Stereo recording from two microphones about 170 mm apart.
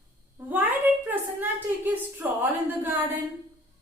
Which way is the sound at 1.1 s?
10° right (ahead or behind).